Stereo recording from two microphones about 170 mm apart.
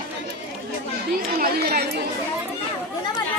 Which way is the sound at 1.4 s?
65° right (ahead or behind).